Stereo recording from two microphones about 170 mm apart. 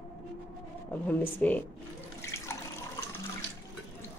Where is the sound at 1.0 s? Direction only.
10° left (ahead or behind).